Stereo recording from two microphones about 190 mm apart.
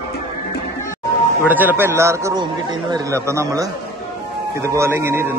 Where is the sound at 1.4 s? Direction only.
10° right (ahead or behind).